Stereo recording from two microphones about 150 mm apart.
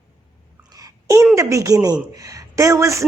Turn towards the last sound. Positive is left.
turn(degrees=-20)  # may be behind; listen again after turning